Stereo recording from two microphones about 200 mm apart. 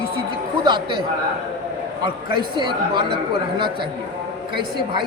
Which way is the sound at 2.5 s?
25° right (ahead or behind).